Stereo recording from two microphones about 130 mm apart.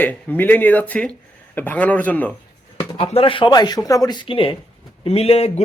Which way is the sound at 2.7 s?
50° left (ahead or behind).